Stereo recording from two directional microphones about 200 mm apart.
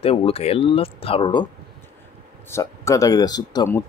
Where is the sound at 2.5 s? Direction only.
15° left (ahead or behind).